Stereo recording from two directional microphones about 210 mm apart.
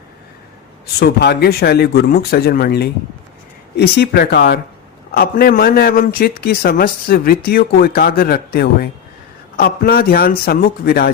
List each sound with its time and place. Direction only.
0.9 s a man's voice: 50° left (ahead or behind)